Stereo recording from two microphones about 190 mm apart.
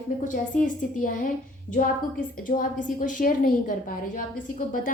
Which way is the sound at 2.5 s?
45° left (ahead or behind).